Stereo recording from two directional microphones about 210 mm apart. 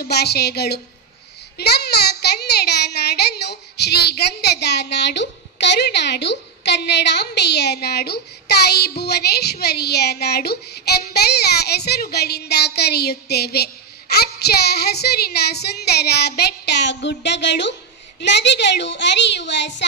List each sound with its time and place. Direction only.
0.0 s a woman's voice: 50° left (ahead or behind)